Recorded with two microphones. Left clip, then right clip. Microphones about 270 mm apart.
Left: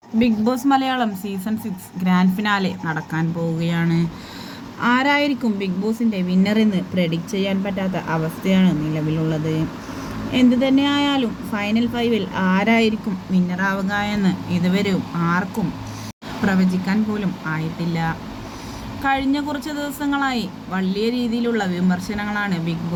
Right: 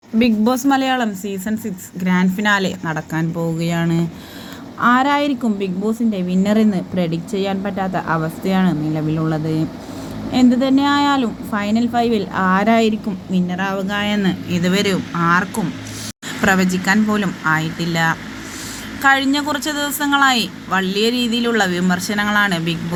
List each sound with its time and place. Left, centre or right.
0.2 s a woman's voice: centre
10.3 s a woman's voice: centre